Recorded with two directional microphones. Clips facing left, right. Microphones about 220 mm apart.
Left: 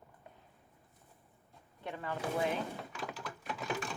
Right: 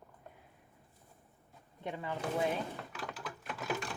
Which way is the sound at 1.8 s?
15° right (ahead or behind).